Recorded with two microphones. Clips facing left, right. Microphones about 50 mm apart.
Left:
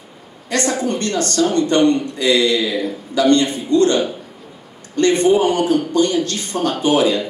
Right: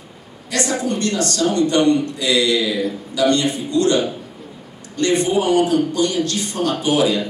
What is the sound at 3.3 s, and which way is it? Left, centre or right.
Speech, left.